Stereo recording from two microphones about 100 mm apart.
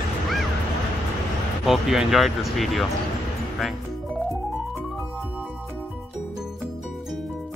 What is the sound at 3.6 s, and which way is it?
Music, centre (ahead or behind).